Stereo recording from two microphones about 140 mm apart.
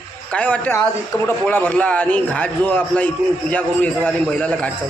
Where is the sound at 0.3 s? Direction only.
10° left (ahead or behind).